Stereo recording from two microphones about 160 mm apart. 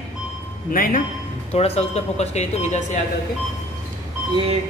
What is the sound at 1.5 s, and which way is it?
Speech, 40° left (ahead or behind).